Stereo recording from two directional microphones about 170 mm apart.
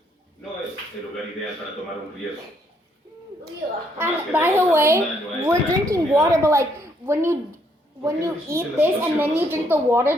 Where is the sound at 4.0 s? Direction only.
10° right (ahead or behind).